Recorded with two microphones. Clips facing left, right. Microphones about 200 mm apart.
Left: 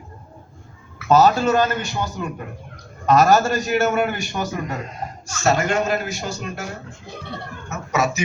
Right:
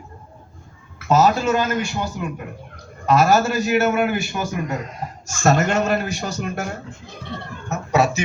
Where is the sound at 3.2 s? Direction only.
40° left (ahead or behind).